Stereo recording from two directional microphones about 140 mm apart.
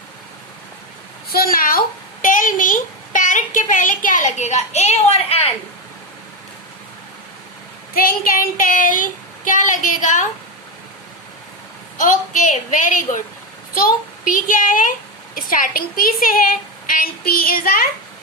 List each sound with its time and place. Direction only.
1.3 s a woman's voice: 90° left
2.2 s a woman's voice: 70° left (ahead or behind); by 5.5 s 45° left (ahead or behind)
7.9 s speech: 90° left; by 10.2 s 65° left (ahead or behind)
11.9 s a woman's voice: 65° left (ahead or behind); by 17.8 s 90° left